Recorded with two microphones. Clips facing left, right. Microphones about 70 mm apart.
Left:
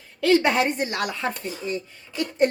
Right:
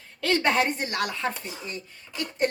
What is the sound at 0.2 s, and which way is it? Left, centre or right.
A woman's voice, centre.